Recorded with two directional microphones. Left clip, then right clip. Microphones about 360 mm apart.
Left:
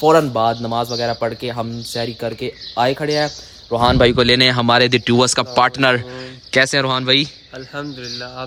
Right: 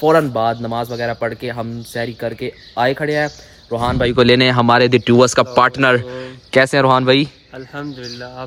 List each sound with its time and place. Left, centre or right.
0.0 s speech: centre
3.8 s speech: left
4.1 s speech: centre